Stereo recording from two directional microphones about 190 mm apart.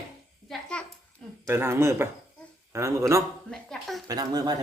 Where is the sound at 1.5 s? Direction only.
10° right (ahead or behind).